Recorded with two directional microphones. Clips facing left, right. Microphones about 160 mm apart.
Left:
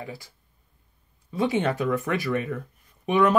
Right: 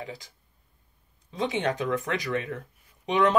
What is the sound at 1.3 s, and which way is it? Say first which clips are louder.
Speech: left 3 dB; 20° right (ahead or behind).